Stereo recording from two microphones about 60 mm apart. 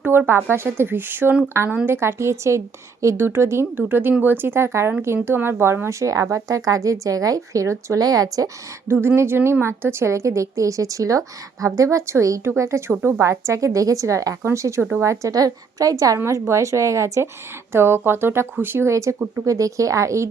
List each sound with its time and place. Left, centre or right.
0.0 s a woman's voice: right
7.9 s a woman's voice: right
8.9 s a woman's voice: right
16.2 s a woman's voice: right
17.7 s speech: right
18.9 s a woman's voice: right